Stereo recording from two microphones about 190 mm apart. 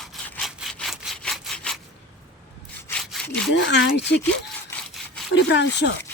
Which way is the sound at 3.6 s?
65° left (ahead or behind).